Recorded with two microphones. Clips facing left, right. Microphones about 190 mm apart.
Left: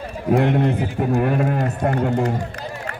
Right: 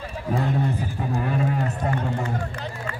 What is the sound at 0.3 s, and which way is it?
A man's voice, 70° left (ahead or behind).